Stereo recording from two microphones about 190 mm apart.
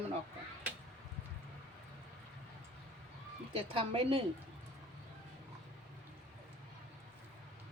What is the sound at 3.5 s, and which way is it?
Speech, 30° right (ahead or behind).